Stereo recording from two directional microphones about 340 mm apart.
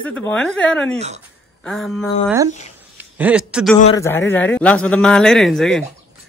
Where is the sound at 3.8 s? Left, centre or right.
Centre.